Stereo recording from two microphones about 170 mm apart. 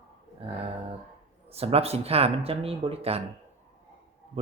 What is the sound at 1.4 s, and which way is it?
Speech, 35° right (ahead or behind).